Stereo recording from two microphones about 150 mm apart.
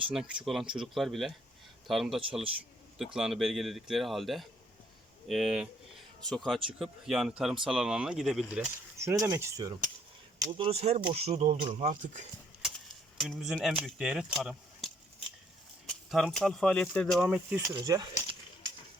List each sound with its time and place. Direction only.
0.1 s speech: 5° right (ahead or behind); by 9.7 s 20° right (ahead or behind)
10.3 s a sound: 25° right (ahead or behind)
10.6 s speech: 45° right (ahead or behind)
11.8 s speech: 55° right (ahead or behind)
13.1 s speech: centre (ahead or behind)
17.7 s speech: 25° right (ahead or behind)